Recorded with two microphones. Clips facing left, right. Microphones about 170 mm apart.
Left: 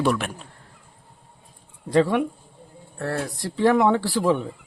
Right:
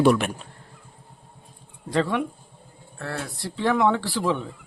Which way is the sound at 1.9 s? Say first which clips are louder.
Left 4 dB; 10° left (ahead or behind).